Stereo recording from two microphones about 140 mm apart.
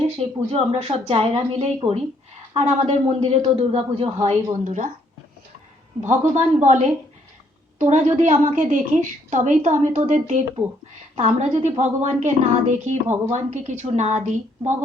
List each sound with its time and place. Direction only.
0.2 s a man's voice: 50° right (ahead or behind)
4.6 s a woman's voice: 60° right (ahead or behind)
6.0 s a woman's voice: 60° right (ahead or behind)
8.6 s a woman's voice: 70° right (ahead or behind)